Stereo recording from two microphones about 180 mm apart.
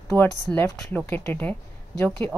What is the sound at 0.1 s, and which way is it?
Speech, 25° right (ahead or behind).